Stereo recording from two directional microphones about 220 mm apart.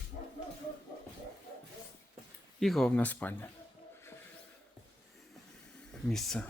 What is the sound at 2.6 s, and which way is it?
Speech, centre (ahead or behind).